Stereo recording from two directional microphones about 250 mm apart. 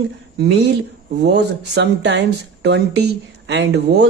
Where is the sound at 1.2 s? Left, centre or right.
Right.